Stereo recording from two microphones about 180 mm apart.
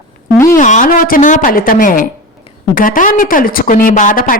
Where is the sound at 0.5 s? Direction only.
45° left (ahead or behind).